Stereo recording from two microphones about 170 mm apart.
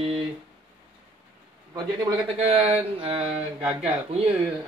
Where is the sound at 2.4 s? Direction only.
35° right (ahead or behind).